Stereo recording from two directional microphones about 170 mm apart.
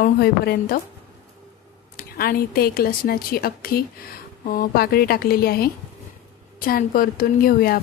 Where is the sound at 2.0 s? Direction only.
60° left (ahead or behind).